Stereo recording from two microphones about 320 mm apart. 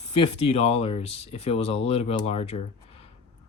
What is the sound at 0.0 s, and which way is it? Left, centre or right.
Speech, centre.